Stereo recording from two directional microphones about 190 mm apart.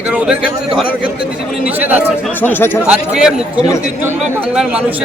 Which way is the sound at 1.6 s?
10° right (ahead or behind).